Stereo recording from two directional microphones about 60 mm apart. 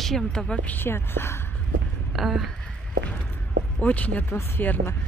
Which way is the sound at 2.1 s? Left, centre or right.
Centre.